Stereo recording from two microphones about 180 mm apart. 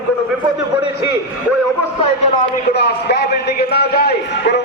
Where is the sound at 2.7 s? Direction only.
65° left (ahead or behind).